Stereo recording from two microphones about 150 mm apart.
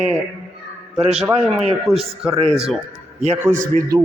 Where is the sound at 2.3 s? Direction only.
35° right (ahead or behind).